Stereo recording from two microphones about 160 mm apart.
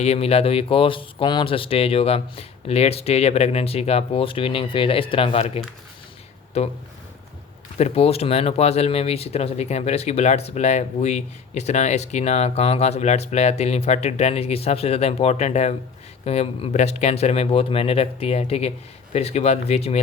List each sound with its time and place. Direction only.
0.0 s speech: 40° left (ahead or behind)
7.8 s speech: 40° left (ahead or behind)